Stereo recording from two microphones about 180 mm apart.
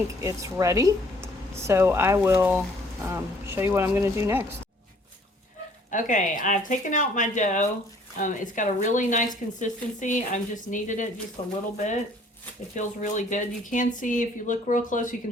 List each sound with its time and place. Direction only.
0.2 s speech: 15° right (ahead or behind)
5.9 s speech: 45° left (ahead or behind)
12.7 s speech: 45° left (ahead or behind)